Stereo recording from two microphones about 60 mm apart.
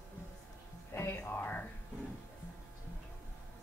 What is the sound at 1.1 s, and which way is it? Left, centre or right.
Music, left.